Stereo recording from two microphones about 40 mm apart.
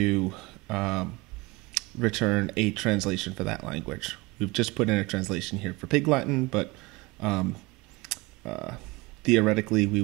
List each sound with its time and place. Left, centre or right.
0.0 s speech: centre